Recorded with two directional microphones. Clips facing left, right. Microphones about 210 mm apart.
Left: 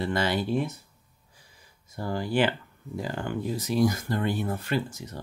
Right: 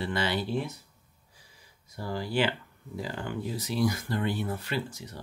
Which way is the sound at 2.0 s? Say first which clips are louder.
Left 3 dB; 50° left (ahead or behind).